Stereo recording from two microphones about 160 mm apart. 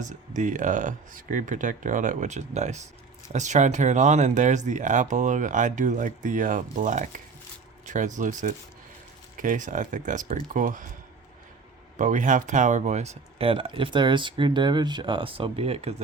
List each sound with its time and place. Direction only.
0.3 s speech: 50° right (ahead or behind)
11.9 s speech: 50° right (ahead or behind)